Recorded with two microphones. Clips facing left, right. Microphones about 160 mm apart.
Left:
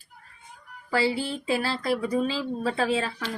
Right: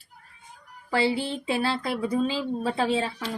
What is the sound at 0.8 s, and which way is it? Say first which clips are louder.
Speech: right 1 dB; 25° right (ahead or behind).